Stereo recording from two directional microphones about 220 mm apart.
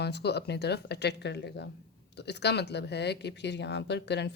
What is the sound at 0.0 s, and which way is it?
A woman's voice, 50° left (ahead or behind).